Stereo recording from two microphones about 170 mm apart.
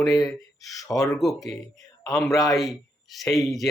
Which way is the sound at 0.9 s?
20° left (ahead or behind).